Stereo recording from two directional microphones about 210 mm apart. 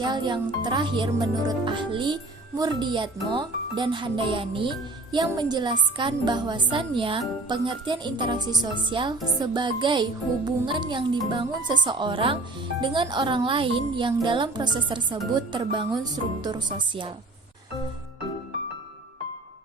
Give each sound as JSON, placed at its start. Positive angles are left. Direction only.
{"t": 0.0, "sound": "speech", "side_deg": -20}